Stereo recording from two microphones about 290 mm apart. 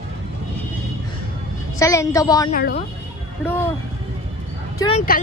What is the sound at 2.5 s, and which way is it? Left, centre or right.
Speech, left.